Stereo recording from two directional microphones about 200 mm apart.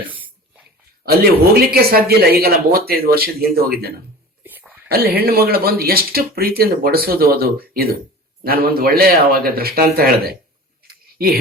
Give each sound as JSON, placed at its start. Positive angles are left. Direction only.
{"t": 0.0, "sound": "a sound", "side_deg": -10}
{"t": 1.0, "sound": "speech", "side_deg": -50}
{"t": 4.4, "sound": "whispering", "side_deg": -10}
{"t": 4.9, "sound": "speech", "side_deg": -50}